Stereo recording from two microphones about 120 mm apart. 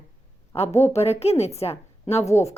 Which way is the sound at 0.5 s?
65° left (ahead or behind).